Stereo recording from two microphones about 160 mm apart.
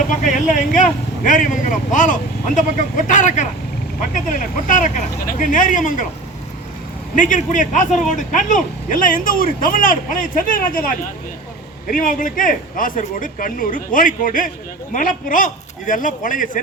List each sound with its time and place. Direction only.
0.1 s speech: 50° left (ahead or behind)
7.2 s speech: 50° left (ahead or behind)